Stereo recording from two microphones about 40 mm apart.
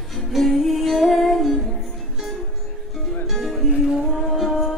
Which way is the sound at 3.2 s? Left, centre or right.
Centre.